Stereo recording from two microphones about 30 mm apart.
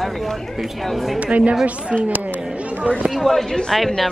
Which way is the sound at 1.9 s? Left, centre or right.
Centre.